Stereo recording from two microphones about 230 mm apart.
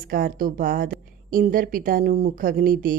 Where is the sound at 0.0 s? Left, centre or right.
Right.